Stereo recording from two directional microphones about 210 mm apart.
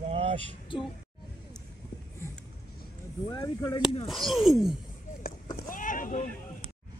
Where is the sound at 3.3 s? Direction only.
15° left (ahead or behind).